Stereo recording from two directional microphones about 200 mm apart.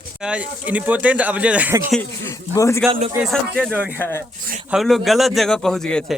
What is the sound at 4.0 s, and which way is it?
Speech, 10° left (ahead or behind).